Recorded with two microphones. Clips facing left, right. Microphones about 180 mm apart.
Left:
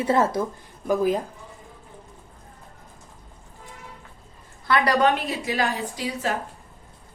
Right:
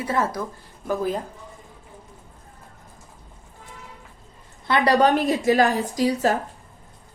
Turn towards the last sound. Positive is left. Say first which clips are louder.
# right 7 dB
turn(degrees=-40)  # may be behind; listen again after turning